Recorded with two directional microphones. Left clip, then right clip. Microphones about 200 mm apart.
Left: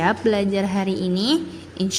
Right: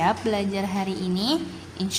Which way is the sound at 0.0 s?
20° left (ahead or behind).